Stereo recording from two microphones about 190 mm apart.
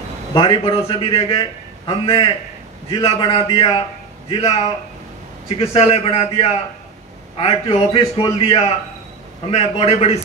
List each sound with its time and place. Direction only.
0.3 s a man's voice: 25° left (ahead or behind)
5.6 s a man's voice: 30° left (ahead or behind)